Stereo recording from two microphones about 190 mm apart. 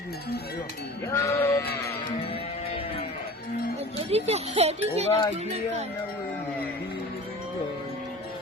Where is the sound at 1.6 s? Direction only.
55° left (ahead or behind).